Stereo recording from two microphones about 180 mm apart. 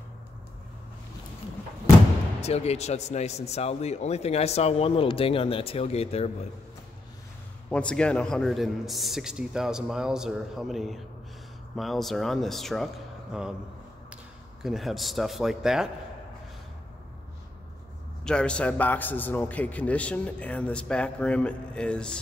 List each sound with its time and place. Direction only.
2.4 s speech: 35° left (ahead or behind)
7.7 s a man's voice: 5° left (ahead or behind)
14.6 s a man's voice: centre (ahead or behind)
18.2 s a man's voice: 5° left (ahead or behind)